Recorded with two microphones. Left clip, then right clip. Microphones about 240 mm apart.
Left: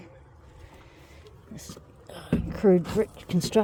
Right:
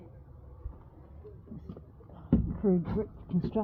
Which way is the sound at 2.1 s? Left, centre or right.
Left.